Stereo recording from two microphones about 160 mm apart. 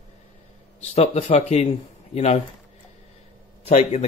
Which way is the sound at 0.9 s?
40° left (ahead or behind).